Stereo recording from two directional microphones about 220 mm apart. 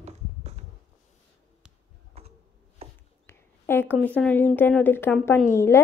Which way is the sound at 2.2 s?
30° right (ahead or behind).